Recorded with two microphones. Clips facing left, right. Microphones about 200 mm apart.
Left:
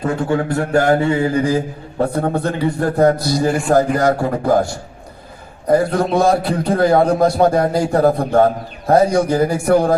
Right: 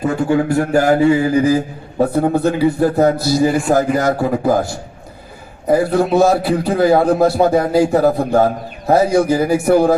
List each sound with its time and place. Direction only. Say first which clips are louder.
0.0 s a man's voice: right 3 dB; 10° right (ahead or behind)
5.6 s a man's voice: right 1 dB; 5° right (ahead or behind)